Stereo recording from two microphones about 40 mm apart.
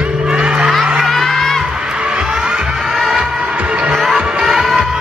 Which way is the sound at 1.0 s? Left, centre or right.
Centre.